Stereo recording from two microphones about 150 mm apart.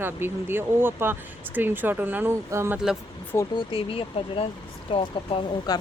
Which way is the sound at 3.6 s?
35° left (ahead or behind).